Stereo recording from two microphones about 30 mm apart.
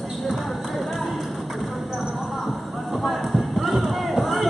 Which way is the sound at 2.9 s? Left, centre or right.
Centre.